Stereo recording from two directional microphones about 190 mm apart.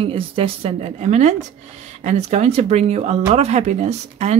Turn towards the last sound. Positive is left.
turn(degrees=-35)  # may be behind; listen again after turning